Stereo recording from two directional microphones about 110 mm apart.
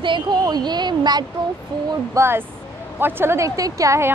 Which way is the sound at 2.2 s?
20° right (ahead or behind).